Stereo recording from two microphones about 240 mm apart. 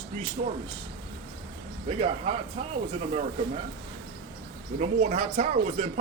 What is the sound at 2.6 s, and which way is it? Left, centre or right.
Speech, right.